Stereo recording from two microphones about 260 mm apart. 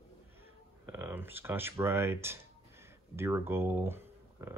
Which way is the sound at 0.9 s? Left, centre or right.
Centre.